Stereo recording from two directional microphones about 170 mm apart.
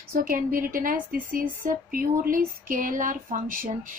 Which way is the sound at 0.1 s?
55° right (ahead or behind).